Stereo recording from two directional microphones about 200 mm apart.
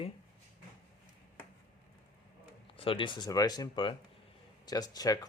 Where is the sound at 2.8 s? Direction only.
25° left (ahead or behind).